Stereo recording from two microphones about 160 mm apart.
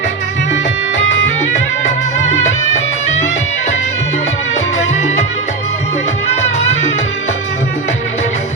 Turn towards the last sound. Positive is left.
turn(degrees=45)  # may be behind; listen again after turning